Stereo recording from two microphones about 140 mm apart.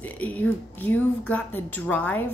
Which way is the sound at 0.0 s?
10° left (ahead or behind).